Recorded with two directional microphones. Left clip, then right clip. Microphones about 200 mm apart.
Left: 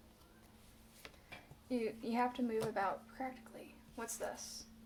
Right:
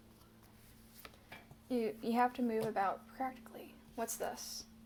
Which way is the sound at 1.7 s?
35° right (ahead or behind).